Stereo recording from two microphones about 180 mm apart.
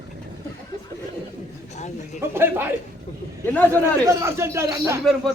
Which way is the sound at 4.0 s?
15° right (ahead or behind).